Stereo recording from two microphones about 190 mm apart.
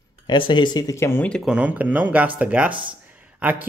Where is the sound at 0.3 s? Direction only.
25° left (ahead or behind).